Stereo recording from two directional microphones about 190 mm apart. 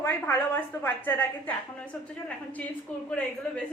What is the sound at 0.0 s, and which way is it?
A woman's voice, 10° left (ahead or behind).